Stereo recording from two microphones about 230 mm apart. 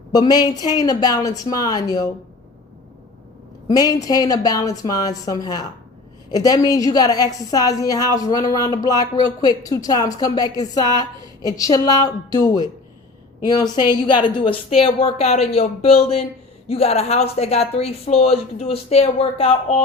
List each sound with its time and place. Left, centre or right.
0.1 s a woman's voice: centre
3.8 s a woman's voice: centre